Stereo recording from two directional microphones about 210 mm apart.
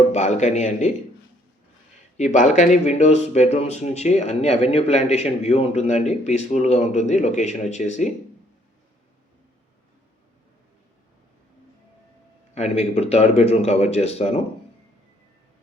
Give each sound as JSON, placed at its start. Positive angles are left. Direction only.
{"t": 0.1, "sound": "a man's voice", "side_deg": 35}
{"t": 2.1, "sound": "speech", "side_deg": 35}
{"t": 12.5, "sound": "speech", "side_deg": 30}